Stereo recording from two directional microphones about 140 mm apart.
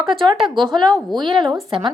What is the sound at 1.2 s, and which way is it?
Speech, 35° right (ahead or behind).